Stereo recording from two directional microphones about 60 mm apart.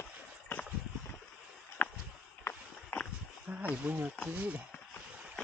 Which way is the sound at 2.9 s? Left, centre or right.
Left.